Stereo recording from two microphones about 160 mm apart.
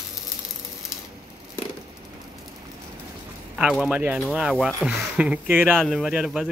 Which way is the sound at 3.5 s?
Centre (ahead or behind).